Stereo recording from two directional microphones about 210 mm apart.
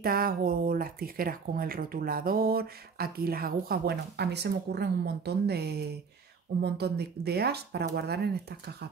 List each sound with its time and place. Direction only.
0.0 s speech: 45° right (ahead or behind)